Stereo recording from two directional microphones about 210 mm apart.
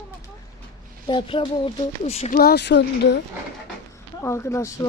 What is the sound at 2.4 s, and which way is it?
Speech, 50° left (ahead or behind).